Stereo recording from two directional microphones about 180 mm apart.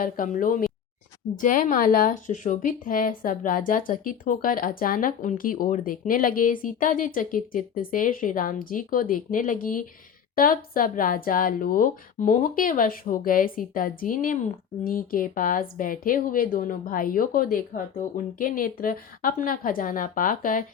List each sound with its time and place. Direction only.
0.0 s speech: 50° left (ahead or behind)